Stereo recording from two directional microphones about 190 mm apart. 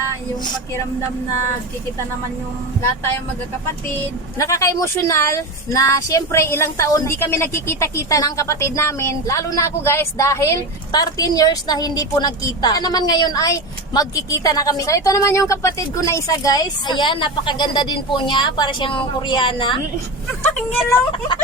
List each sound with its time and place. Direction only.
4.4 s speech: 15° left (ahead or behind)